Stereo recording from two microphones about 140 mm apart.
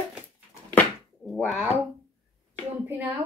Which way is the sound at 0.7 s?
10° left (ahead or behind).